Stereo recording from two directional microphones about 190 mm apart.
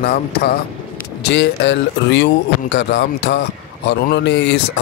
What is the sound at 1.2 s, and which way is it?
Speech, 70° left (ahead or behind).